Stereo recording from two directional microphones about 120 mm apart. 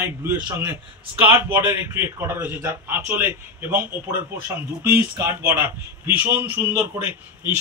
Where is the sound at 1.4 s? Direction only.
20° right (ahead or behind).